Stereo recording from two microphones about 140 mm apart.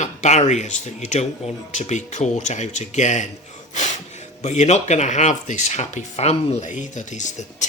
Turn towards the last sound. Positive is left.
turn(degrees=60)  # may be behind; listen again after turning